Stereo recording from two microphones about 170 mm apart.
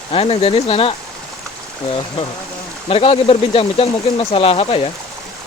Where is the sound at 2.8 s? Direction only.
35° left (ahead or behind).